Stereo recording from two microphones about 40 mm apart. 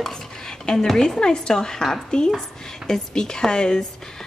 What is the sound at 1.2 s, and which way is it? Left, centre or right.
Speech, left.